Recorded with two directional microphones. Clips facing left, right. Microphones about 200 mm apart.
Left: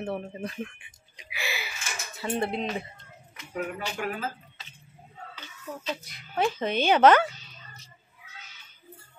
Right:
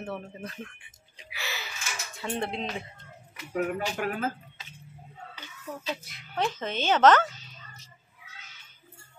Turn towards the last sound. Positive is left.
turn(degrees=10)  # may be behind; listen again after turning